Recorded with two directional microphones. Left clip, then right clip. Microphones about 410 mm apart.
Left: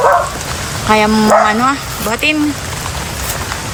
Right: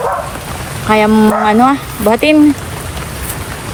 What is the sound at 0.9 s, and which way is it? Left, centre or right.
Speech, centre.